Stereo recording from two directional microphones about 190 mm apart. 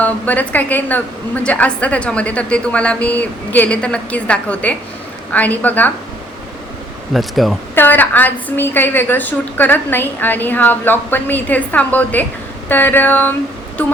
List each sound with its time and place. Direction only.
0.0 s a woman's voice: 10° left (ahead or behind)
7.1 s a woman's voice: centre (ahead or behind)